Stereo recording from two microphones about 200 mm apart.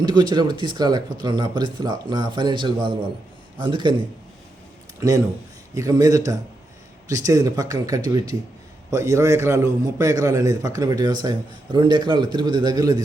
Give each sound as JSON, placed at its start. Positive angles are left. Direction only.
{"t": 0.0, "sound": "speech", "side_deg": -20}
{"t": 4.9, "sound": "a man's voice", "side_deg": -15}